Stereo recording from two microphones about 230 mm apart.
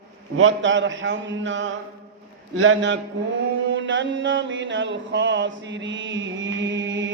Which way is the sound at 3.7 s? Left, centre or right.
Right.